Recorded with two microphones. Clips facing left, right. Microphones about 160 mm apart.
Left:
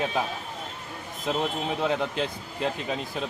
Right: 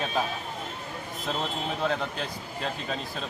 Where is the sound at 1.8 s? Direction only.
15° left (ahead or behind).